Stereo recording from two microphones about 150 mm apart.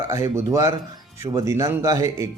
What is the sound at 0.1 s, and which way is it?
Speech, 20° right (ahead or behind).